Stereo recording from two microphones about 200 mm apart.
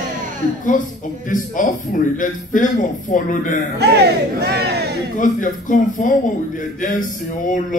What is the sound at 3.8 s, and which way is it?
Speech, 55° right (ahead or behind).